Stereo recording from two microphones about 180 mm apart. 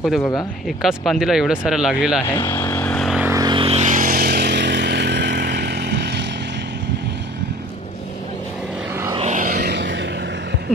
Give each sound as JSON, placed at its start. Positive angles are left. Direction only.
{"t": 0.2, "sound": "speech", "side_deg": 20}
{"t": 0.7, "sound": "speech", "side_deg": 0}
{"t": 2.2, "sound": "vehicle", "side_deg": 15}
{"t": 3.2, "sound": "vehicle", "side_deg": -15}
{"t": 9.1, "sound": "vehicle", "side_deg": -40}
{"t": 9.6, "sound": "vehicle", "side_deg": -70}